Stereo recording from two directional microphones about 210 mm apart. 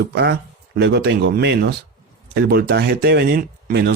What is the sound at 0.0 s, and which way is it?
Speech, 55° right (ahead or behind).